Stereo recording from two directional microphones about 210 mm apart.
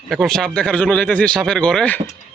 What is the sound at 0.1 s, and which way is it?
Speech, centre (ahead or behind).